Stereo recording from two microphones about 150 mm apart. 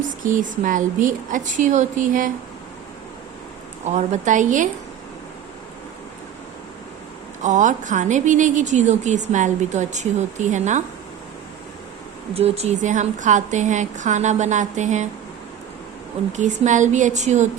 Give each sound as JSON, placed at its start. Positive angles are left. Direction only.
{"t": 0.3, "sound": "a woman's voice", "side_deg": -60}
{"t": 3.8, "sound": "a woman's voice", "side_deg": -50}
{"t": 7.4, "sound": "a woman's voice", "side_deg": -55}
{"t": 12.3, "sound": "a woman's voice", "side_deg": -40}
{"t": 16.3, "sound": "a woman's voice", "side_deg": -55}